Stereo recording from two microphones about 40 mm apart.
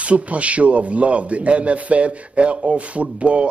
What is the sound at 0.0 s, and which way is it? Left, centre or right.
Speech, right.